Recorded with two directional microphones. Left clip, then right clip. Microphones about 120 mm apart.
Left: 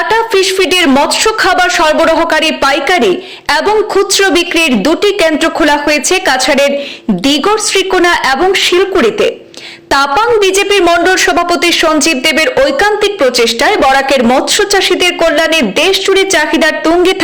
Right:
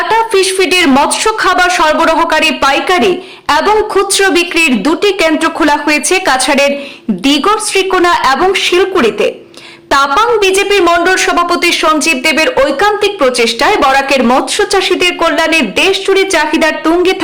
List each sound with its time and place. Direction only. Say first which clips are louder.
0.1 s a woman's voice: right 1 dB; 20° left (ahead or behind)